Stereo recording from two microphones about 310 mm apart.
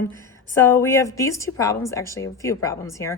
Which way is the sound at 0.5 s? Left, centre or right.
Centre.